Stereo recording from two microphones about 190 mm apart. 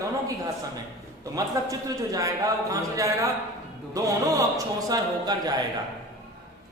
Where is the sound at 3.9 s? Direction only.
15° right (ahead or behind).